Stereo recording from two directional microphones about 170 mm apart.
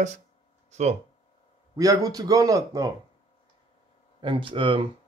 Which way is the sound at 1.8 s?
20° right (ahead or behind).